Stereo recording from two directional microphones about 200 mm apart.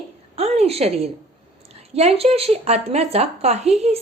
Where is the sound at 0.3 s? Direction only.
30° right (ahead or behind).